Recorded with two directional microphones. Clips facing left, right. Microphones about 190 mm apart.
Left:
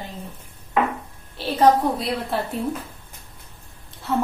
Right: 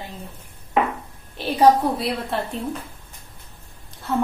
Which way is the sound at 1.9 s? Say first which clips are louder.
Even; centre (ahead or behind).